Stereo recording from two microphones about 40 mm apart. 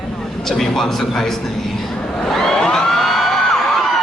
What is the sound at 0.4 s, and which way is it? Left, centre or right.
Speech, centre.